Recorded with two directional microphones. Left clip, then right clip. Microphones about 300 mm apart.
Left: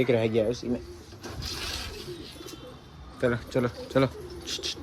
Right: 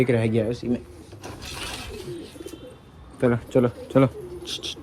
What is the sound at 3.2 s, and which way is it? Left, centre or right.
Speech, right.